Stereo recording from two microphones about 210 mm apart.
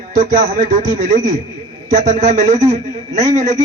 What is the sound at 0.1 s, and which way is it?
A man's voice, 40° right (ahead or behind).